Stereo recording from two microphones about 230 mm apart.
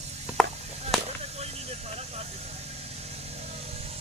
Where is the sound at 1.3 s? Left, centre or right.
Right.